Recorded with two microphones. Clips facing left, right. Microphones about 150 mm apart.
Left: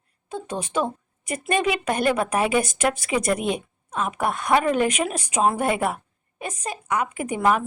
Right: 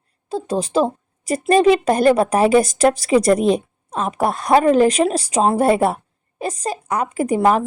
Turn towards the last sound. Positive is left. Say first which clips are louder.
# right 6 dB
turn(degrees=-35)  # may be behind; listen again after turning